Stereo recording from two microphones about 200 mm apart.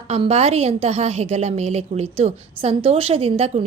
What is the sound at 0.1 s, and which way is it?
A woman's voice, 30° right (ahead or behind).